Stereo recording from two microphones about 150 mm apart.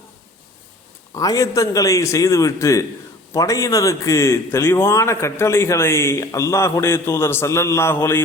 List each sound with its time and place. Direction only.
1.1 s a man's voice: 20° left (ahead or behind)